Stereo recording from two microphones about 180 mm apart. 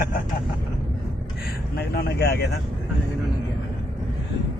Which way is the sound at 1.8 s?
65° left (ahead or behind).